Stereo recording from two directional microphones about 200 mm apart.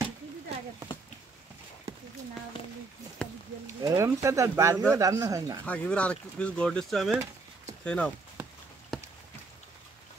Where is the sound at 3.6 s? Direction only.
15° right (ahead or behind).